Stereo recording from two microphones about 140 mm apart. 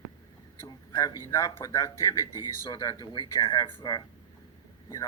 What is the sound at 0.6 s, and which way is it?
Speech, 25° left (ahead or behind).